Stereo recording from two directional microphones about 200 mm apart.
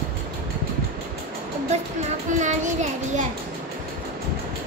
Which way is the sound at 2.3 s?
40° right (ahead or behind).